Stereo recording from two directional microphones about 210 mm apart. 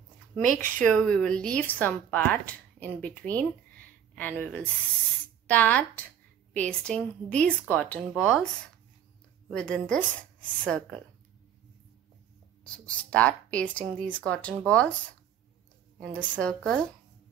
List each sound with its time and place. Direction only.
0.6 s speech: 5° left (ahead or behind)
9.5 s speech: 5° left (ahead or behind)
12.8 s speech: 5° left (ahead or behind)
16.0 s speech: 5° left (ahead or behind)